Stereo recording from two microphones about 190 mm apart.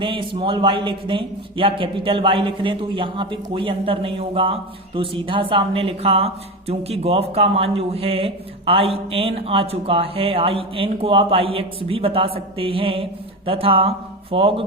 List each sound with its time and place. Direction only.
0.0 s a woman's voice: 25° right (ahead or behind)